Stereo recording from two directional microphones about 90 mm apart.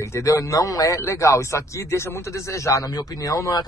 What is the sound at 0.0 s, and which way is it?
Speech, 35° left (ahead or behind).